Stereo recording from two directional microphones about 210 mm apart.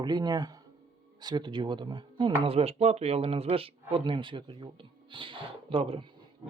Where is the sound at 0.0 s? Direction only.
20° right (ahead or behind).